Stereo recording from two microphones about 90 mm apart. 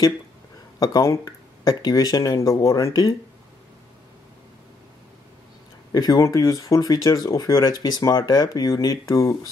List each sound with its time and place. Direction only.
0.7 s speech: 40° left (ahead or behind)
5.9 s speech: 40° left (ahead or behind)